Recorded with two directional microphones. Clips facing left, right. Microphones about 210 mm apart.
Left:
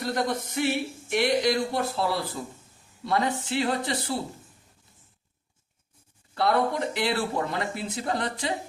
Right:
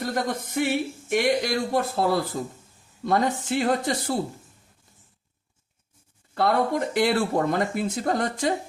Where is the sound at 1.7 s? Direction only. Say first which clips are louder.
Right 4 dB; 50° right (ahead or behind).